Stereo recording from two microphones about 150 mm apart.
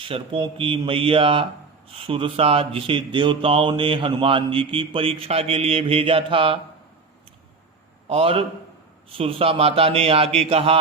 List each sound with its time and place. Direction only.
0.0 s speech: 35° right (ahead or behind)
8.1 s speech: 40° right (ahead or behind)